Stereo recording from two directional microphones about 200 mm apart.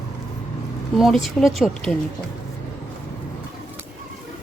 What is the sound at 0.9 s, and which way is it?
Speech, centre (ahead or behind).